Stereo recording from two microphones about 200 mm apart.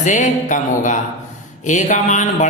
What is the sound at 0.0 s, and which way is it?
A woman's voice, 40° left (ahead or behind).